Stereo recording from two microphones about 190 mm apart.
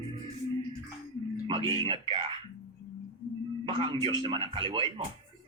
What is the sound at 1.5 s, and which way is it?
Speech, 25° right (ahead or behind).